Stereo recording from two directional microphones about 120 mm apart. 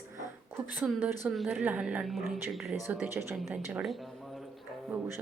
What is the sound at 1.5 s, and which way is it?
A woman's voice, 15° right (ahead or behind).